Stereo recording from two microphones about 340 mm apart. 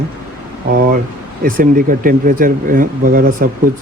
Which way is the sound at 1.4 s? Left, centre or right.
Right.